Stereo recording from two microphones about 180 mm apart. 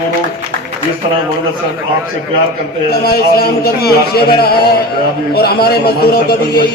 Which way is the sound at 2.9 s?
60° left (ahead or behind).